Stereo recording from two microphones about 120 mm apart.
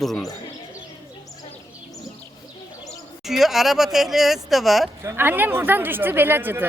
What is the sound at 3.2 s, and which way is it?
Speech, centre (ahead or behind).